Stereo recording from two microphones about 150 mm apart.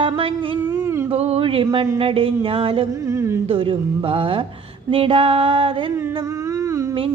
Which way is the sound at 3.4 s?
35° right (ahead or behind).